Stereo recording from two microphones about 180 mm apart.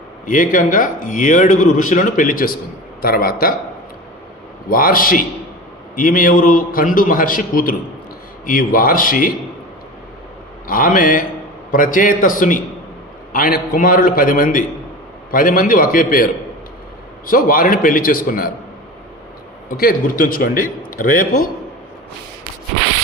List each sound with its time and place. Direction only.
0.3 s a man's voice: 50° left (ahead or behind)
4.7 s speech: 55° left (ahead or behind)
10.7 s speech: 50° left (ahead or behind)
19.7 s speech: 55° left (ahead or behind)